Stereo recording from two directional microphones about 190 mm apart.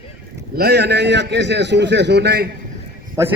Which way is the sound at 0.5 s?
55° right (ahead or behind).